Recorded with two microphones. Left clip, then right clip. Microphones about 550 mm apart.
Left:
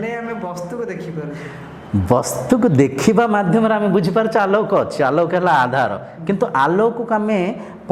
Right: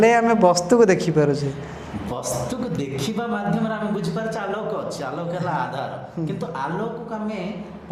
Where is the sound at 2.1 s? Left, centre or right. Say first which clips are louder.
Left 11 dB; left.